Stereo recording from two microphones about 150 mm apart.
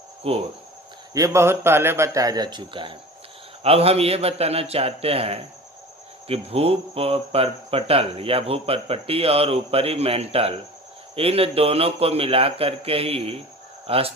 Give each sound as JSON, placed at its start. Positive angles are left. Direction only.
{"t": 0.2, "sound": "speech", "side_deg": -40}
{"t": 1.1, "sound": "a man's voice", "side_deg": -20}